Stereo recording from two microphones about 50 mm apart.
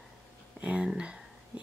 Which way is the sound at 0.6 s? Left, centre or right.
Right.